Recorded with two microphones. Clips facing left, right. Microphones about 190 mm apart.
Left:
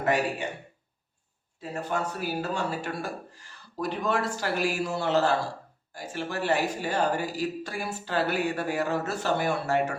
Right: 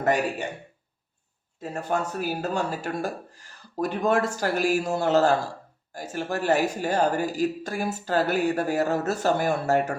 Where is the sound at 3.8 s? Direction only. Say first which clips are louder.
Right 5 dB; 50° right (ahead or behind).